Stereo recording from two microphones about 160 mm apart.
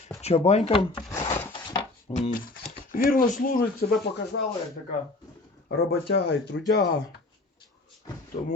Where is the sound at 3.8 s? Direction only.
75° left (ahead or behind).